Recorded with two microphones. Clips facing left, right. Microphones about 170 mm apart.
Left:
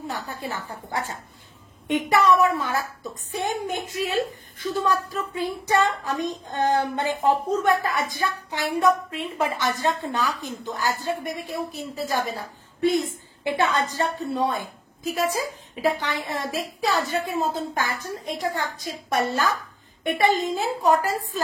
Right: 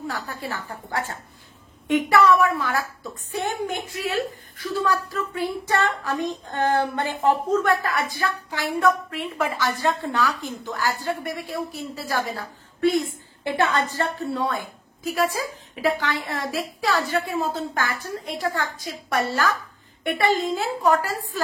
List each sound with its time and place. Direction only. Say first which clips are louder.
0.3 s a woman's voice: even; 15° left (ahead or behind)